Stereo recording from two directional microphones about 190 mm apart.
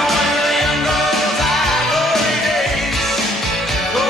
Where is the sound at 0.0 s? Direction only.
Centre (ahead or behind).